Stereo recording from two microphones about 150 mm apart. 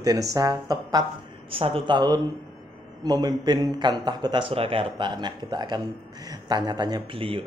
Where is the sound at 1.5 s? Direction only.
40° right (ahead or behind).